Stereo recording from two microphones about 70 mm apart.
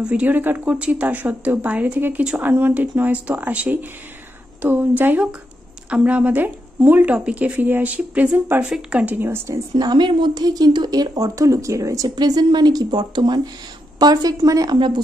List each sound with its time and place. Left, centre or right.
0.0 s a woman's voice: centre
9.0 s a woman's voice: right
9.8 s a woman's voice: right
12.2 s a woman's voice: right
13.9 s a woman's voice: right